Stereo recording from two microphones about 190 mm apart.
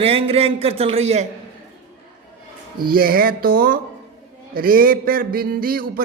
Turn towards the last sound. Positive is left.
turn(degrees=-50)  # may be behind; listen again after turning